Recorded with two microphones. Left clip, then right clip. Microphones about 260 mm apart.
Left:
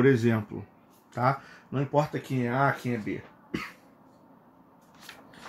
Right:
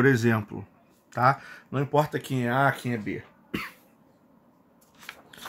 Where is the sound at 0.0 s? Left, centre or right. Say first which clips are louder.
Right 1 dB; centre.